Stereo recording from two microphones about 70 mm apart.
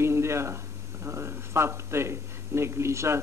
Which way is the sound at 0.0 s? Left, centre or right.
Right.